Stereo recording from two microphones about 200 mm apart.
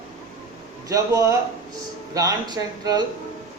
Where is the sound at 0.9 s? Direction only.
15° right (ahead or behind).